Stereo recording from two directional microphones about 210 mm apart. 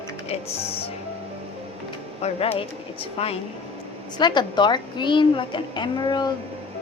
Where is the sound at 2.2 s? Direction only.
30° left (ahead or behind).